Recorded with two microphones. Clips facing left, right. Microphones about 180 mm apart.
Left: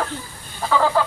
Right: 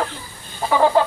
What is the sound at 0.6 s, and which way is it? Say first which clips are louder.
Fowl: right 3 dB; 20° right (ahead or behind).